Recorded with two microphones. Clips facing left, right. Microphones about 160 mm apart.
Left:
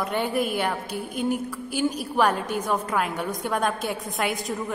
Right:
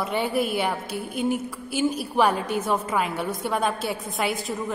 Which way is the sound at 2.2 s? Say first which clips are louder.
Right 1 dB; 10° right (ahead or behind).